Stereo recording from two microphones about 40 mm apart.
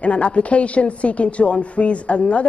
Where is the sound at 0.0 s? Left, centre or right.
Left.